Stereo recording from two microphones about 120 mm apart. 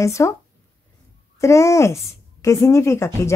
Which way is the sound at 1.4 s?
25° left (ahead or behind).